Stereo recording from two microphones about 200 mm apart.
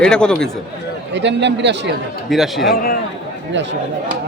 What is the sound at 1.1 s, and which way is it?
Speech, 60° right (ahead or behind).